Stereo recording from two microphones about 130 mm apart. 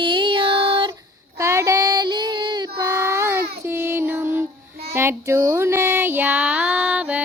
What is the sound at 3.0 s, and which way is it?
Child singing, 20° right (ahead or behind).